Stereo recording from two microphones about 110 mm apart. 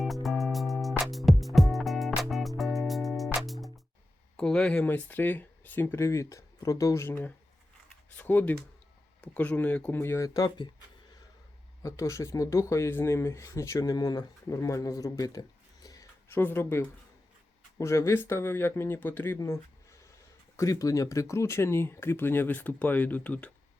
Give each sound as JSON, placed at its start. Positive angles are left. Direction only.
{"t": 0.0, "sound": "music", "side_deg": 0}
{"t": 4.4, "sound": "speech", "side_deg": 5}
{"t": 11.8, "sound": "speech", "side_deg": 30}
{"t": 16.3, "sound": "speech", "side_deg": 20}
{"t": 20.6, "sound": "speech", "side_deg": 30}